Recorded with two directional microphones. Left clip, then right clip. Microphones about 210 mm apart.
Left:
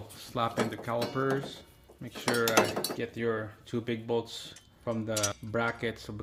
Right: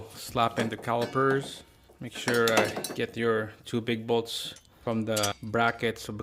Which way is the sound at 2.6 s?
Centre (ahead or behind).